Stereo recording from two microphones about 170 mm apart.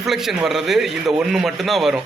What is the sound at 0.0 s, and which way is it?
A man's voice, centre (ahead or behind).